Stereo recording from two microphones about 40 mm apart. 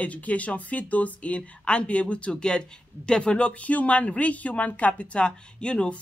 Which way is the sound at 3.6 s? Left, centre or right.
Left.